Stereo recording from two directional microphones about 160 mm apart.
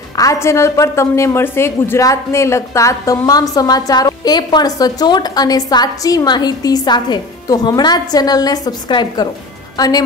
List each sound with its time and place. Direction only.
0.1 s a woman's voice: 20° left (ahead or behind)